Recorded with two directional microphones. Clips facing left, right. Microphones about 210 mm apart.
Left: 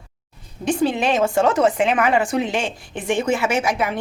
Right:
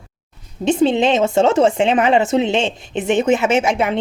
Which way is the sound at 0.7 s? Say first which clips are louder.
Right 5 dB; 25° right (ahead or behind).